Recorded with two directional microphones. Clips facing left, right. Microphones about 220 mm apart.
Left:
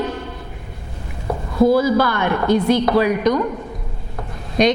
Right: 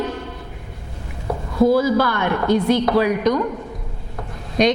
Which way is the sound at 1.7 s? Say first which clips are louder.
Left 1 dB; 10° left (ahead or behind).